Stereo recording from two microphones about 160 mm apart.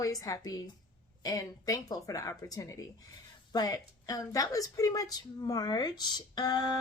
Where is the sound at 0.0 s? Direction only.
20° left (ahead or behind).